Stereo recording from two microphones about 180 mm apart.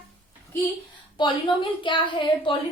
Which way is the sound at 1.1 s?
25° left (ahead or behind).